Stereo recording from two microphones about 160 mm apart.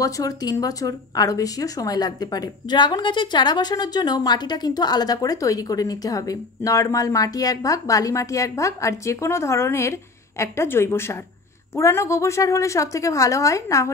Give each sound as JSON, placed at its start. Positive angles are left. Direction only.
{"t": 0.0, "sound": "speech", "side_deg": 25}